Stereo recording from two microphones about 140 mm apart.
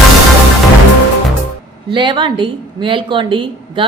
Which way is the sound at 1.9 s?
35° right (ahead or behind).